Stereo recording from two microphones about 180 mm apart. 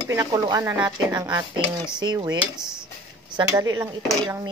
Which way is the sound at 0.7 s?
10° right (ahead or behind).